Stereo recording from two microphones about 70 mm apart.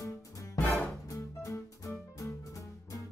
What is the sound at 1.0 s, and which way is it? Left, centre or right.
Music, left.